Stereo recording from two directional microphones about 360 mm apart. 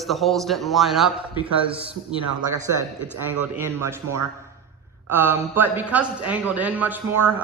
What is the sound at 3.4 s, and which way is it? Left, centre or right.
A man's voice, centre.